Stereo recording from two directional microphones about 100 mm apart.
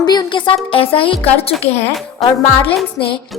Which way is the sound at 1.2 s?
85° left.